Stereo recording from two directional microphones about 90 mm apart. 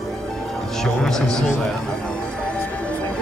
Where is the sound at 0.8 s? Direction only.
5° left (ahead or behind).